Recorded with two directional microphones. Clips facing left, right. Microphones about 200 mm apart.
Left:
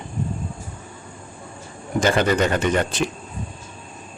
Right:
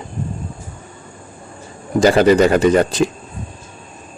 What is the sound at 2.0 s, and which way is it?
Speech, 35° right (ahead or behind).